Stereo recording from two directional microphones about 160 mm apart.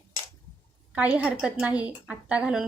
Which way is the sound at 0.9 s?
10° right (ahead or behind).